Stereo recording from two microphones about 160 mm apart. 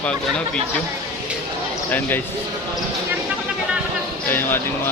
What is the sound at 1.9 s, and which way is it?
Speech, 15° left (ahead or behind).